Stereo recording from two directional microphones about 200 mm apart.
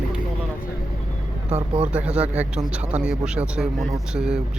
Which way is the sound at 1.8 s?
5° right (ahead or behind).